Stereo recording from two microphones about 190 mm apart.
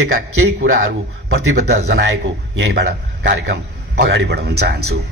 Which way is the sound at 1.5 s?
60° right (ahead or behind).